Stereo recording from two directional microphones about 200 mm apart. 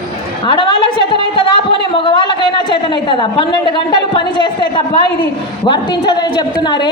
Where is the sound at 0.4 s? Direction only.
25° left (ahead or behind).